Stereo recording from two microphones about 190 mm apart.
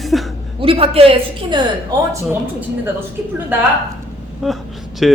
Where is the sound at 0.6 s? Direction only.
30° right (ahead or behind).